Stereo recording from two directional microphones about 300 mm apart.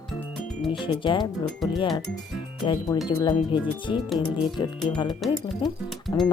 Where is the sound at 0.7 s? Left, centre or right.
Centre.